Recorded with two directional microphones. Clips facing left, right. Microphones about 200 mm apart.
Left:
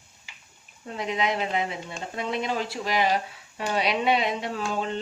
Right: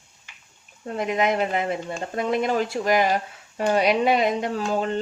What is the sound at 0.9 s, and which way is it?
A woman's voice, 50° right (ahead or behind).